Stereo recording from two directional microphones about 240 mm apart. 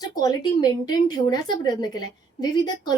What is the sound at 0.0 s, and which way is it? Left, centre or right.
A woman's voice, centre.